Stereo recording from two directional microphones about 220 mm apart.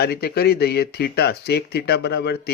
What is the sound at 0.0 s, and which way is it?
Speech, 45° left (ahead or behind).